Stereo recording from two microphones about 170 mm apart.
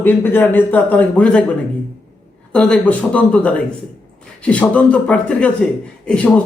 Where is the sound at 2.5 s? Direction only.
10° left (ahead or behind).